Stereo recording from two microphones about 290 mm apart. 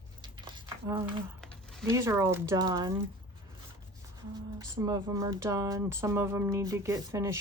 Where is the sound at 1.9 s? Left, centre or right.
Centre.